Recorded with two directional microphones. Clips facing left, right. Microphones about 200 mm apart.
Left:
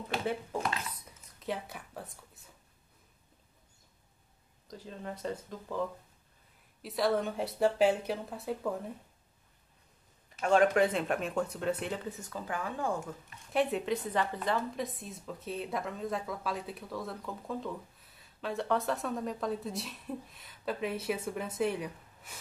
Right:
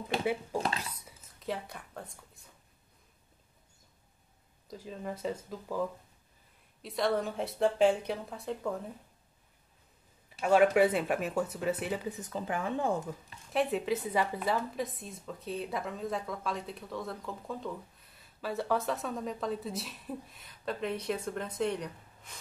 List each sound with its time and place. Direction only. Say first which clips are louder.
0.2 s speech: right 2 dB; 10° right (ahead or behind)
1.0 s a sound: even; centre (ahead or behind)
4.6 s a woman's voice: right 2 dB; 5° right (ahead or behind)
10.4 s speech: right 2 dB; 5° right (ahead or behind)
12.2 s speech: right 3 dB; 20° right (ahead or behind)
13.5 s a woman's voice: even; centre (ahead or behind)